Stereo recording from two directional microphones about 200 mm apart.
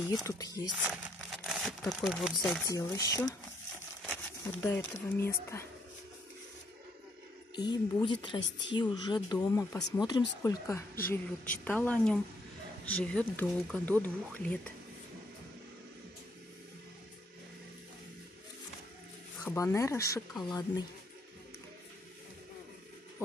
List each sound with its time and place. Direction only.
0.0 s speech: 20° left (ahead or behind)
0.7 s speech: 5° right (ahead or behind)
2.6 s speech: 15° left (ahead or behind)
7.5 s speech: 20° left (ahead or behind)
8.4 s a woman's voice: 60° left (ahead or behind)
8.7 s speech: 20° left (ahead or behind); by 14.7 s 5° left (ahead or behind)
19.4 s speech: 15° left (ahead or behind)